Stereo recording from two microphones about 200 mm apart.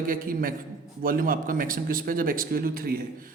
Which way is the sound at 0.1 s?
45° right (ahead or behind).